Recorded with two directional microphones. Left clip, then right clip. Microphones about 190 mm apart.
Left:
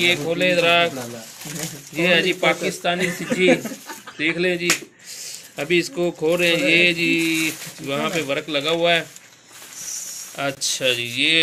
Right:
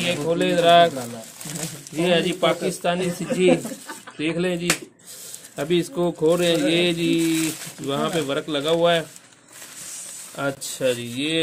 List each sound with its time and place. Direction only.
0.0 s speech: 40° right (ahead or behind)
2.0 s speech: 45° right (ahead or behind)
10.3 s speech: 45° right (ahead or behind)